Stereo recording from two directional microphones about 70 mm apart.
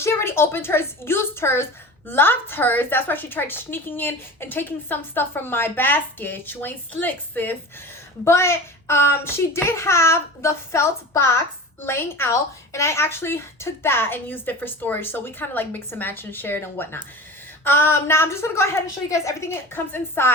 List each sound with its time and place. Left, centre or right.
0.0 s a woman's voice: left
8.2 s a woman's voice: left